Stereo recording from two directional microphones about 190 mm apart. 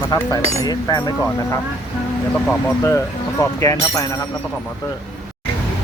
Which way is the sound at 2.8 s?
15° left (ahead or behind).